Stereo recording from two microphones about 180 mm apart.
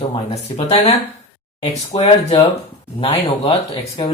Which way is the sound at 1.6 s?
35° left (ahead or behind).